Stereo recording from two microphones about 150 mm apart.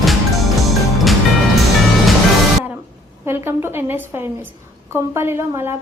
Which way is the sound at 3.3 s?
15° right (ahead or behind).